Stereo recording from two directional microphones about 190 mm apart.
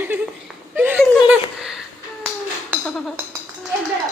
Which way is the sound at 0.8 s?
10° right (ahead or behind).